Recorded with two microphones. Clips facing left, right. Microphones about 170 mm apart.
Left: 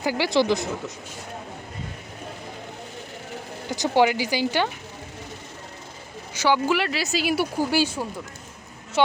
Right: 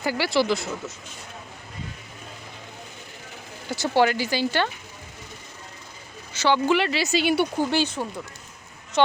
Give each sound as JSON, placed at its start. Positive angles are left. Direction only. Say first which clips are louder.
{"t": 0.0, "sound": "speech", "louder": "left 1 dB", "side_deg": 15}
{"t": 3.7, "sound": "speech", "louder": "left 1 dB", "side_deg": 15}
{"t": 6.3, "sound": "speech", "louder": "right 1 dB", "side_deg": 10}